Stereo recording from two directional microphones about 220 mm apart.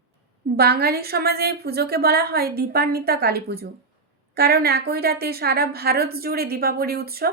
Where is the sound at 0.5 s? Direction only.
45° right (ahead or behind).